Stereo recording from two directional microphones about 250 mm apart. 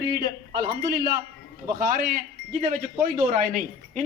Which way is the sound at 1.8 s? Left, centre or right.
Right.